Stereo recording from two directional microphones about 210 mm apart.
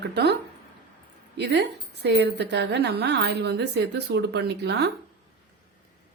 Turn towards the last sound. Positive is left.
turn(degrees=-50)  # may be behind; listen again after turning